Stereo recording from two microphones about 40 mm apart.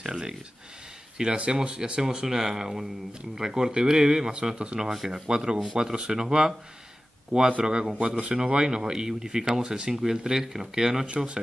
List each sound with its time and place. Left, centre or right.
0.0 s a man's voice: right